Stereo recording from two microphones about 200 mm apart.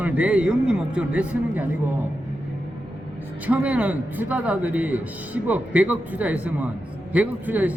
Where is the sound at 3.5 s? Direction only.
5° right (ahead or behind).